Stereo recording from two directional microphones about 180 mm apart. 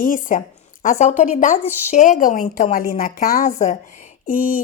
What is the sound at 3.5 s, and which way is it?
Speech, 40° left (ahead or behind).